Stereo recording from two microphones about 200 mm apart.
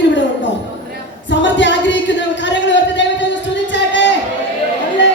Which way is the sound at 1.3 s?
65° left (ahead or behind).